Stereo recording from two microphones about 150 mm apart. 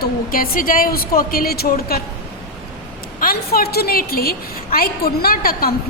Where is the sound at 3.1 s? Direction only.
85° left.